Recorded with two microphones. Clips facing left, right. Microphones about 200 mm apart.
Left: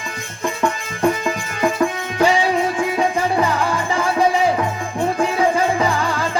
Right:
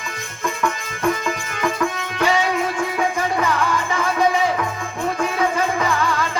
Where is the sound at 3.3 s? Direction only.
30° left (ahead or behind).